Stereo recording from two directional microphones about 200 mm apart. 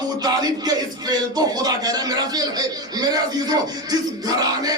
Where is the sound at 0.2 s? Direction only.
20° right (ahead or behind).